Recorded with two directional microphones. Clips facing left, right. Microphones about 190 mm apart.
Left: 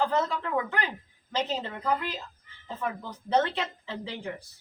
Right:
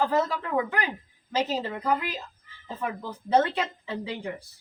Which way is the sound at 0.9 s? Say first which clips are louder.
Right 4 dB; 5° right (ahead or behind).